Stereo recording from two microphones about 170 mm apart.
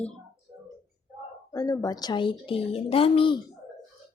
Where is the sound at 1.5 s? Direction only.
20° left (ahead or behind).